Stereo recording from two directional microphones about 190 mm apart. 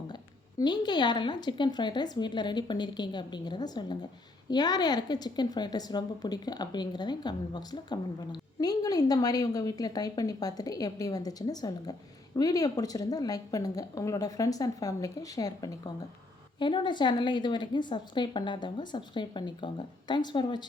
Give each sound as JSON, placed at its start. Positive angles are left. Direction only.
{"t": 0.6, "sound": "a woman's voice", "side_deg": 25}